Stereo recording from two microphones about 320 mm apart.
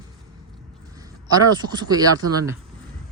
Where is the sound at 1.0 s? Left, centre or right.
Centre.